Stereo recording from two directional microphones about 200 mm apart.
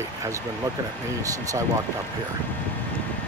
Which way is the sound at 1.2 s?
15° right (ahead or behind).